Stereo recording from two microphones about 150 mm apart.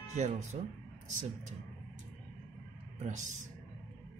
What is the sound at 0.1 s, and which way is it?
Speech, 55° right (ahead or behind).